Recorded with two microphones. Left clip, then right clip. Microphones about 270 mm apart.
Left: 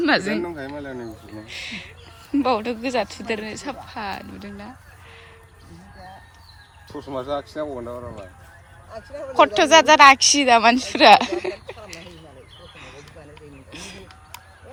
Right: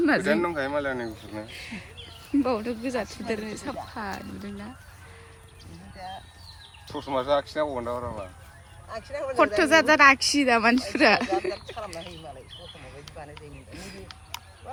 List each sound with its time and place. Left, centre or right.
0.0 s speech: centre
0.3 s speech: centre
1.5 s a woman's voice: centre
6.9 s speech: right
9.4 s a woman's voice: centre
13.7 s a woman's voice: centre